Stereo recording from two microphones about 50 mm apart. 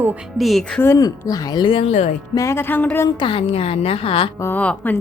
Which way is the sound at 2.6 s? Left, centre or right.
Left.